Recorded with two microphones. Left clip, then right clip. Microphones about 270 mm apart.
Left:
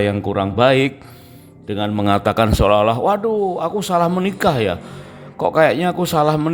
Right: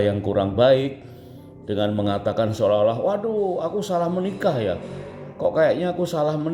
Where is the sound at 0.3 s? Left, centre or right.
Left.